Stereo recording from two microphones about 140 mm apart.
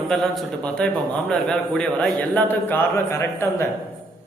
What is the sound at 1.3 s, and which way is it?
A man's voice, 5° left (ahead or behind).